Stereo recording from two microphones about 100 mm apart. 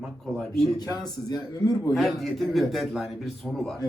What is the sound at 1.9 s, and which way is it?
A man's voice, centre (ahead or behind).